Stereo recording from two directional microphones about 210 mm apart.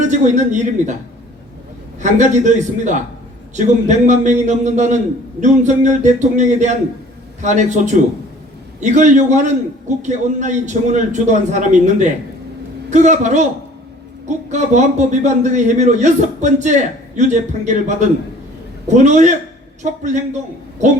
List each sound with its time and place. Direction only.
0.0 s a man's voice: 35° right (ahead or behind)
2.0 s speech: 35° right (ahead or behind)